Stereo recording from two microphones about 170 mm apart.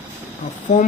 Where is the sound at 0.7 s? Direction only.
40° left (ahead or behind).